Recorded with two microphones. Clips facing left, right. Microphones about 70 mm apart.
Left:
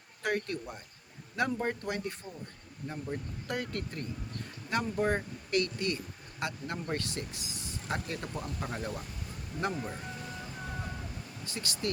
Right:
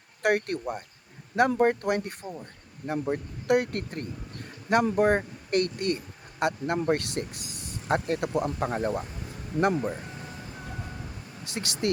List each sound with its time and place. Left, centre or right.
0.2 s speech: right
8.6 s speech: right
11.5 s speech: right